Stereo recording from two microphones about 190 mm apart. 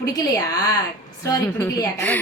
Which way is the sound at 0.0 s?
20° left (ahead or behind).